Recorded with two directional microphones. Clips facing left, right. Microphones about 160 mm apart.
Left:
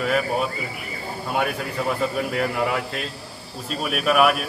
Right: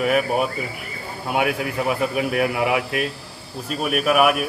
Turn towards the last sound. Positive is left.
turn(degrees=-5)  # may be behind; listen again after turning